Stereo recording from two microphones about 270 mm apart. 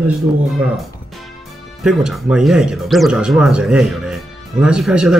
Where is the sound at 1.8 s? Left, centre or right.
Centre.